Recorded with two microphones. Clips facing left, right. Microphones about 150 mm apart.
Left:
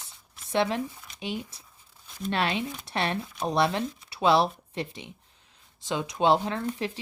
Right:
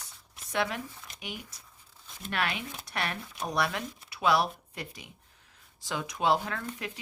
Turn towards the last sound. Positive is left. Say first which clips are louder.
# left 7 dB
turn(degrees=30)  # may be behind; listen again after turning